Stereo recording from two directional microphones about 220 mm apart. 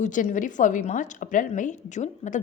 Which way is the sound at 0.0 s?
35° left (ahead or behind).